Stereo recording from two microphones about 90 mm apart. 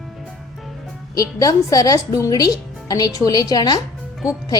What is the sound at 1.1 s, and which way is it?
A woman's voice, 40° left (ahead or behind).